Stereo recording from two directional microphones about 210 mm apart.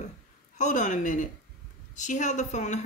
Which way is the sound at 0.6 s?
35° left (ahead or behind).